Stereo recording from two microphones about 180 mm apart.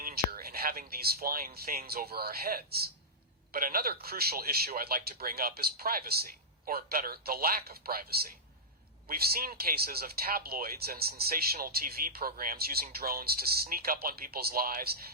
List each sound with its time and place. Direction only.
0.0 s speech: 60° right (ahead or behind)